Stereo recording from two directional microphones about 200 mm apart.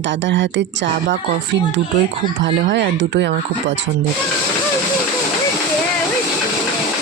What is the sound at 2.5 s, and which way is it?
Speech, 60° right (ahead or behind).